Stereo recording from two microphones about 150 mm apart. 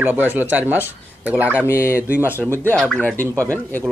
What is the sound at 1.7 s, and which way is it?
Speech, 20° left (ahead or behind).